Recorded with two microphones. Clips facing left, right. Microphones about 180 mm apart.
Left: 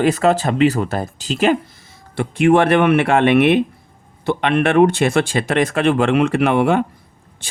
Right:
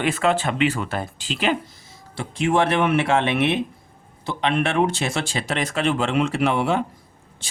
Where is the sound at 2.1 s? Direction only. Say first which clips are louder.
Left 7 dB; 60° left (ahead or behind).